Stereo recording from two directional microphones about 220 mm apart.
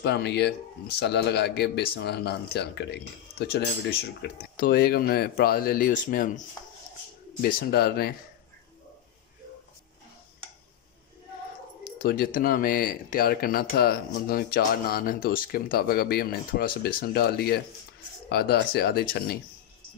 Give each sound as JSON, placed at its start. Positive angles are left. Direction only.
{"t": 0.0, "sound": "speech", "side_deg": 50}
{"t": 7.4, "sound": "speech", "side_deg": 45}
{"t": 12.0, "sound": "speech", "side_deg": 40}